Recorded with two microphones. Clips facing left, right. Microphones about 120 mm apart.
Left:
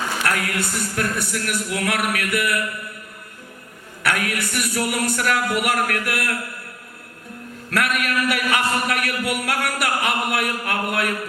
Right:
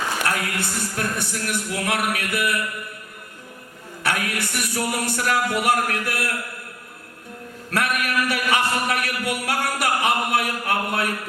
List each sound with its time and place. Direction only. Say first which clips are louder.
0.3 s speech: left 2 dB; 25° right (ahead or behind)
4.0 s speech: left 2 dB; 25° right (ahead or behind)
7.7 s a man's voice: left 1 dB; 25° right (ahead or behind)